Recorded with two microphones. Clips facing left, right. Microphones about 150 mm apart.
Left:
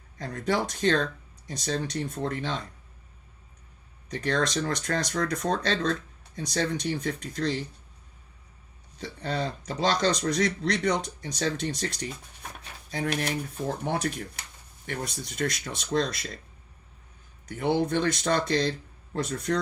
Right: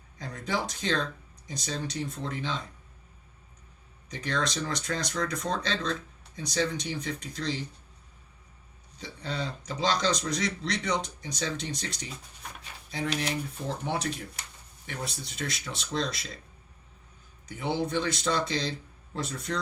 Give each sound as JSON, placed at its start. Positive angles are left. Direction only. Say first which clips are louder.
{"t": 0.2, "sound": "speech", "louder": "left 4 dB", "side_deg": 55}
{"t": 4.1, "sound": "speech", "louder": "left 4 dB", "side_deg": 55}
{"t": 9.0, "sound": "speech", "louder": "left 4 dB", "side_deg": 55}
{"t": 17.5, "sound": "speech", "louder": "left 4 dB", "side_deg": 55}